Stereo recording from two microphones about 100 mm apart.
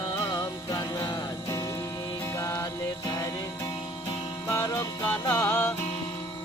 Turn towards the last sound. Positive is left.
turn(degrees=20)  # may be behind; listen again after turning